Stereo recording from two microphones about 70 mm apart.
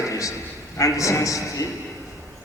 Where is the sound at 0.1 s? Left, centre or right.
Left.